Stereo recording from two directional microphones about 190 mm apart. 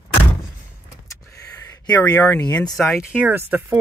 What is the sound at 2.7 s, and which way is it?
Speech, centre (ahead or behind).